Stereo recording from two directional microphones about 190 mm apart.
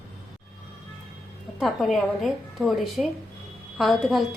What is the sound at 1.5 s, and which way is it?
A woman's voice, centre (ahead or behind).